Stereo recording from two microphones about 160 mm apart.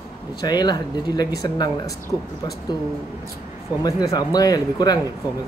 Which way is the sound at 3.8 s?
25° left (ahead or behind).